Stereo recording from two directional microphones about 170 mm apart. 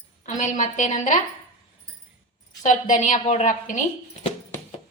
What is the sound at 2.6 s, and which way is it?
A woman's voice, 45° left (ahead or behind).